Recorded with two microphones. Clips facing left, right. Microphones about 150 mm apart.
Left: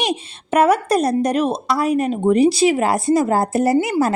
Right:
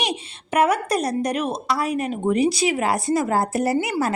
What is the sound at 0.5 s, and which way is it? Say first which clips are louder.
Speech: left 4 dB; 15° right (ahead or behind).